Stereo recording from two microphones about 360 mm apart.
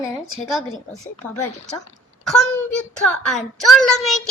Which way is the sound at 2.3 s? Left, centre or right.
Centre.